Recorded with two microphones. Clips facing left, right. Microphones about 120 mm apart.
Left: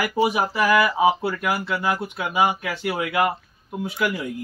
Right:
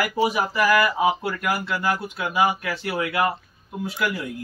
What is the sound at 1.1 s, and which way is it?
Speech, 5° left (ahead or behind).